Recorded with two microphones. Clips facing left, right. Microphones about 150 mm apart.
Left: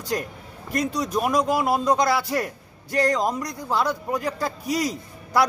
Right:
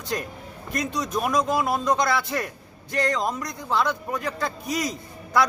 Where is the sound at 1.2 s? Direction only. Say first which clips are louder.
Left 1 dB; 10° left (ahead or behind).